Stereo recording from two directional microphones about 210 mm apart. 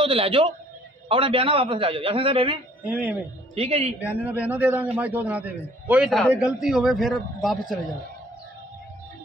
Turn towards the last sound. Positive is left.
turn(degrees=0)  # may be behind; listen again after turning